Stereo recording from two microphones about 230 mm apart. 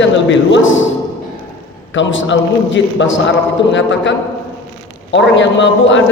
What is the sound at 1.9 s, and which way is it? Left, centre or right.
A man's voice, left.